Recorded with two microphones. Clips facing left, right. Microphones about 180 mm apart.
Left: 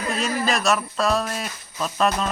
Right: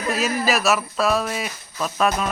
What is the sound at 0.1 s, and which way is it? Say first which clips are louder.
Speech: right 3 dB; 5° right (ahead or behind).